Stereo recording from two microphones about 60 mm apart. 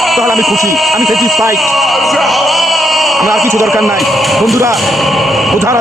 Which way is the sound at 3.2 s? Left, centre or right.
Right.